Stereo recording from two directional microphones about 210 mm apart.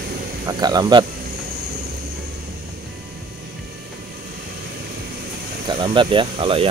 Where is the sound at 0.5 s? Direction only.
20° right (ahead or behind).